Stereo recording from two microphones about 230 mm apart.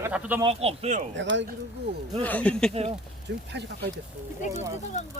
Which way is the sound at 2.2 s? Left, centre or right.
Centre.